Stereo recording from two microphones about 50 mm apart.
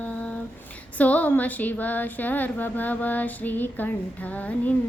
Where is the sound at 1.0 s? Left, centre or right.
Left.